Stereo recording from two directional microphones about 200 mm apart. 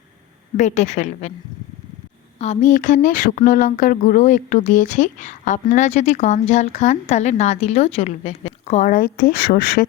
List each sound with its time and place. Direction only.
0.5 s speech: 35° left (ahead or behind)
2.4 s speech: 35° left (ahead or behind)